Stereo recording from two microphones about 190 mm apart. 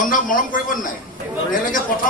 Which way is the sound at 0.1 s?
45° left (ahead or behind).